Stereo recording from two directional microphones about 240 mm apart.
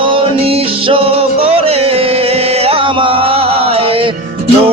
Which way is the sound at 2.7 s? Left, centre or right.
Right.